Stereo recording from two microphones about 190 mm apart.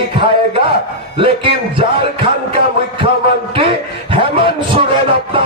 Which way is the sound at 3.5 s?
30° right (ahead or behind).